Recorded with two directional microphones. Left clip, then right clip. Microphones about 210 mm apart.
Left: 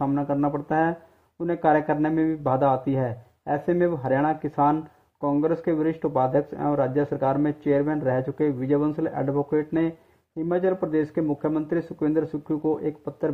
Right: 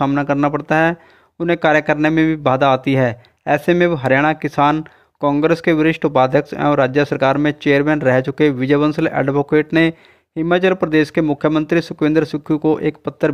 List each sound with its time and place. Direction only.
0.0 s speech: 30° right (ahead or behind)
2.2 s speech: 40° right (ahead or behind)
2.6 s speech: 25° right (ahead or behind)